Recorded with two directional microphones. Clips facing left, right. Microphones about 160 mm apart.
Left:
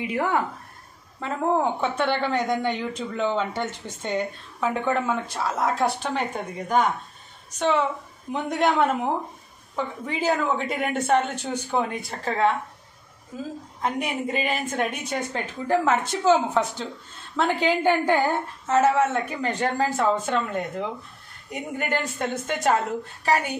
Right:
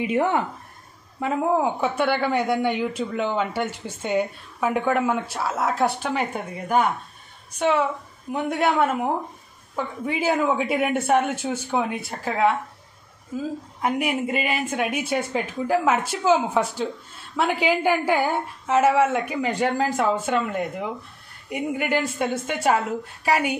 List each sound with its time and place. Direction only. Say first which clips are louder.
0.0 s speech: right 3 dB; 20° right (ahead or behind)
1.2 s a woman's voice: right 2 dB; 10° right (ahead or behind)
13.7 s a woman's voice: right 3 dB; 10° right (ahead or behind)
21.5 s a woman's voice: right 4 dB; 10° right (ahead or behind)